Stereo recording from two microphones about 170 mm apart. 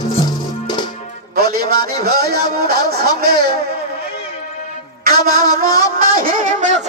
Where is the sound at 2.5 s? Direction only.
65° right (ahead or behind).